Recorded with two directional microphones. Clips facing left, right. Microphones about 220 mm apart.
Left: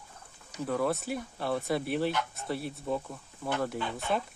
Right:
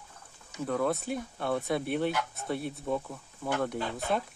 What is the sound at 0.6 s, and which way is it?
Speech, centre (ahead or behind).